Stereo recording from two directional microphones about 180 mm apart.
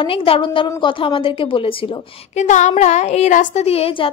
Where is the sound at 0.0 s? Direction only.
30° left (ahead or behind).